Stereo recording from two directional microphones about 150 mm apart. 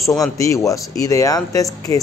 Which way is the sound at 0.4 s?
20° left (ahead or behind).